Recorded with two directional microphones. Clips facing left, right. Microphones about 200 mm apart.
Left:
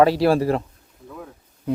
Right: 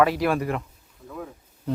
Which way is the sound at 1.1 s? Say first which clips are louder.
Right 2 dB; centre (ahead or behind).